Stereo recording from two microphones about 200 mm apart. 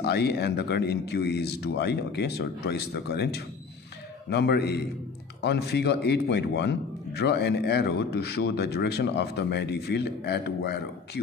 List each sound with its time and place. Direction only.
0.0 s a man's voice: 55° left (ahead or behind)